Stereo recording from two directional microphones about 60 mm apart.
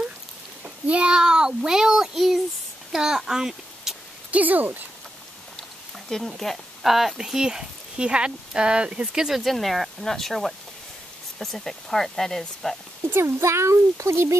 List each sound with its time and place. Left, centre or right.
0.8 s a child's voice: centre
4.3 s speech: right
6.0 s speech: centre
9.4 s speech: centre
13.0 s speech: right